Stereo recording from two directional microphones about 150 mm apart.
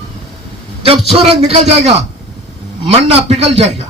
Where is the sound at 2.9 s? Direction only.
40° right (ahead or behind).